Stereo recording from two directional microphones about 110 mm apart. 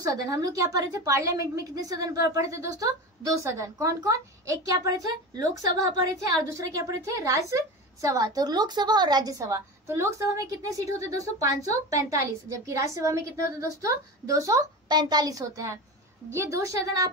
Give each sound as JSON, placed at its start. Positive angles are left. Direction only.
{"t": 0.0, "sound": "a woman's voice", "side_deg": -30}